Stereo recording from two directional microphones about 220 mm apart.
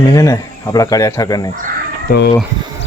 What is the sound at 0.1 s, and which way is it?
Speech, 15° left (ahead or behind).